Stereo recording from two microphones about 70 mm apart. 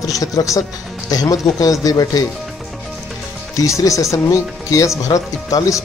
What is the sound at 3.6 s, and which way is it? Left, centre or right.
Speech, left.